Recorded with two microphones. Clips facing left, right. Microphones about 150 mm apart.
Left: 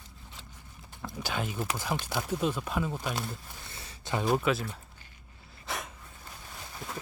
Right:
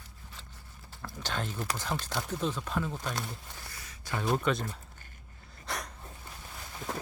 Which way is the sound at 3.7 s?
30° left (ahead or behind).